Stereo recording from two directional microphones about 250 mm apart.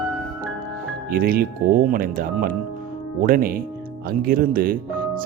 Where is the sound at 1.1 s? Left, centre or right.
Right.